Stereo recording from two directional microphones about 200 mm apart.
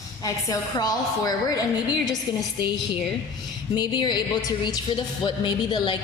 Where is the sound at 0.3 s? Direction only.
20° left (ahead or behind).